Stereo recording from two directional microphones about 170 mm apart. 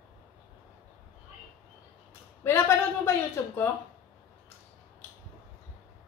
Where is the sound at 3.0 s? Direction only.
15° left (ahead or behind).